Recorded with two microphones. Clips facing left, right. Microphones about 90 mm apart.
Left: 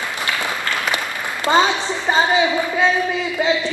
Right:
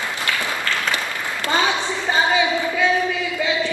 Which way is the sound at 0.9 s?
20° left (ahead or behind).